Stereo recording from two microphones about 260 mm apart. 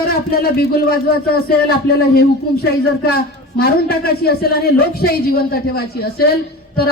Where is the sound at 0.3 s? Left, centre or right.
Left.